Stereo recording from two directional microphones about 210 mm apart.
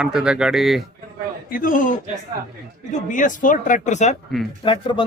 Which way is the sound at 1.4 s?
45° left (ahead or behind).